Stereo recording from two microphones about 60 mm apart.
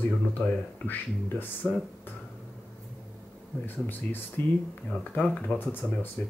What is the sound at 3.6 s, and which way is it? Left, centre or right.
Speech, left.